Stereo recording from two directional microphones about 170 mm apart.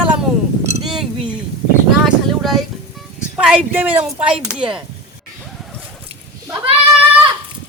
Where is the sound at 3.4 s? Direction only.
5° right (ahead or behind).